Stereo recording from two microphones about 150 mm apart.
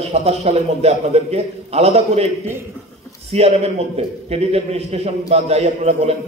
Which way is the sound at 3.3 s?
45° right (ahead or behind).